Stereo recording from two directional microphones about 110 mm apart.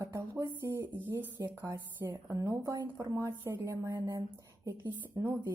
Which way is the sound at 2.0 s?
30° right (ahead or behind).